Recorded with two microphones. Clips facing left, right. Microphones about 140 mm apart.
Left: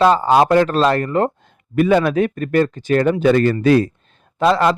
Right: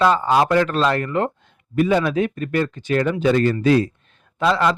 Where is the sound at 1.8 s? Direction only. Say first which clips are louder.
Left 3 dB; 60° left (ahead or behind); by 3.3 s 45° left (ahead or behind).